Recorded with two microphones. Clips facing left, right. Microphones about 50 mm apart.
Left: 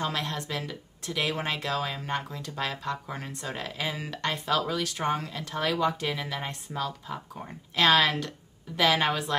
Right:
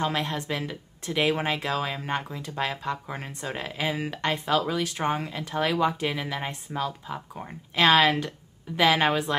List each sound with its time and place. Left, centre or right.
0.0 s speech: right